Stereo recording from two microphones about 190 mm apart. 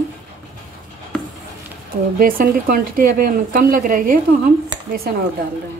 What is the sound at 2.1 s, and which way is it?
Speech, 50° right (ahead or behind).